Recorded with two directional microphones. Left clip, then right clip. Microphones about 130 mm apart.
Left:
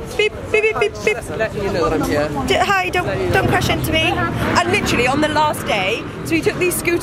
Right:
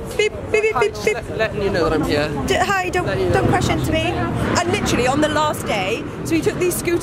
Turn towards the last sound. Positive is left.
turn(degrees=0)  # may be behind; listen again after turning